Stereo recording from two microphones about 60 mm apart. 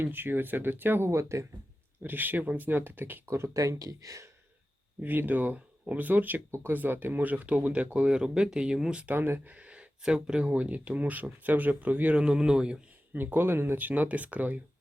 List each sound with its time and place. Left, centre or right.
0.0 s speech: right
1.0 s speech: right
2.0 s speech: right
3.2 s speech: right
3.5 s speech: right
4.9 s speech: right; by 9.0 s centre
9.0 s speech: right; by 12.8 s centre
13.1 s speech: right